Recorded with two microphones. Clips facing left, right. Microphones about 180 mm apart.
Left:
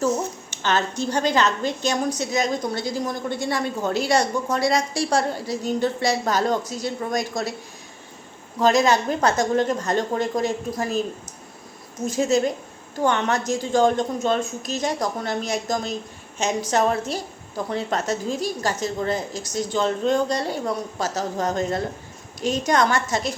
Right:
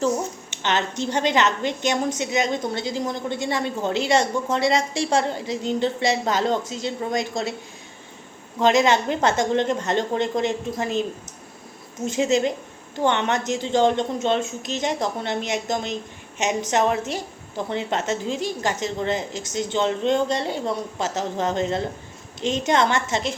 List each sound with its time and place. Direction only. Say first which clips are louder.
0.6 s a woman's voice: left 1 dB; 20° right (ahead or behind)
8.6 s a woman's voice: even; 20° right (ahead or behind)